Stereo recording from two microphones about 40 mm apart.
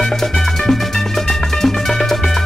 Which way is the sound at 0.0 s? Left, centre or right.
Centre.